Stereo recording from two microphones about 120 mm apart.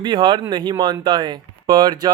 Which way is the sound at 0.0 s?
40° right (ahead or behind).